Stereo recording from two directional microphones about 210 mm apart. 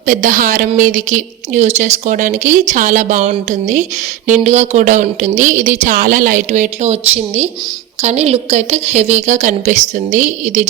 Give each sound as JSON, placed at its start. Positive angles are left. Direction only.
{"t": 0.0, "sound": "a woman's voice", "side_deg": -40}